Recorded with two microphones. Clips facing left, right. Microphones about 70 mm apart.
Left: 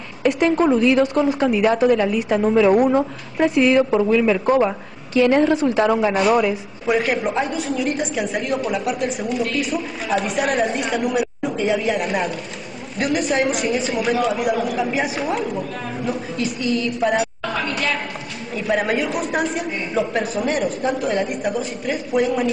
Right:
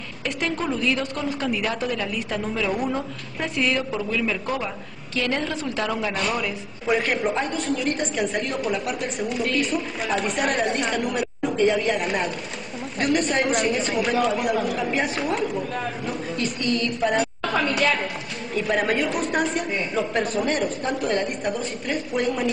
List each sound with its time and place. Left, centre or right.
0.3 s a woman's voice: centre
2.4 s a woman's voice: left
5.1 s a woman's voice: centre
18.5 s a woman's voice: centre